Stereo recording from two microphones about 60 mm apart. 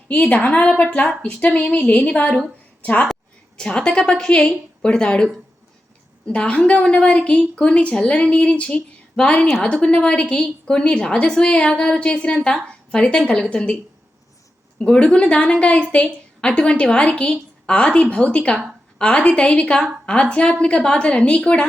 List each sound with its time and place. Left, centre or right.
0.1 s a woman's voice: left
14.8 s a woman's voice: centre